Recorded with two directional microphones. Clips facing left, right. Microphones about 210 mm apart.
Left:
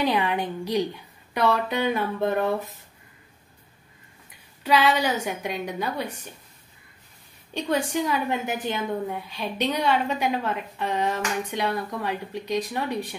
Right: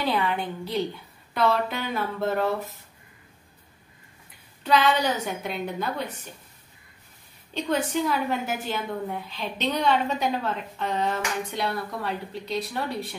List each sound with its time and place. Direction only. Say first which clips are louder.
0.0 s a woman's voice: left 2 dB; 15° left (ahead or behind)
4.6 s a woman's voice: left 1 dB; 10° left (ahead or behind)
7.5 s a woman's voice: left 1 dB; 15° left (ahead or behind)